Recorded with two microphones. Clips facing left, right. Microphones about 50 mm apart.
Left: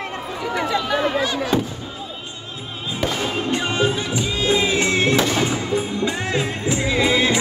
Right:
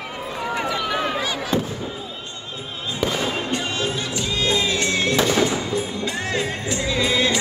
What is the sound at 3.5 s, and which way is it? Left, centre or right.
Music, centre.